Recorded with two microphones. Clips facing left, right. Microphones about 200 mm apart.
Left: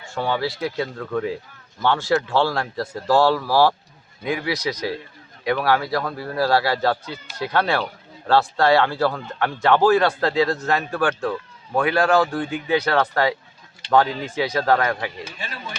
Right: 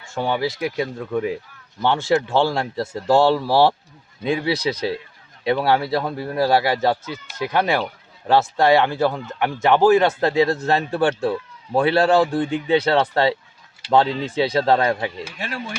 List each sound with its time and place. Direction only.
0.1 s speech: 15° right (ahead or behind)
15.4 s speech: 80° right